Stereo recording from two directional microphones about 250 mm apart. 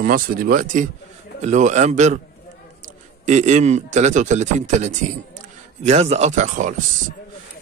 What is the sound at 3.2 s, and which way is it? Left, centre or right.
Speech, right.